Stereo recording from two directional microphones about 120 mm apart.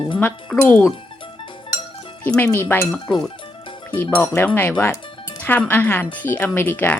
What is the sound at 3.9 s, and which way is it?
Chink, 20° left (ahead or behind).